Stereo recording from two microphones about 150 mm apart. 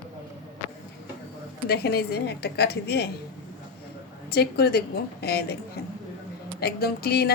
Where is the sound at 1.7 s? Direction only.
90° left.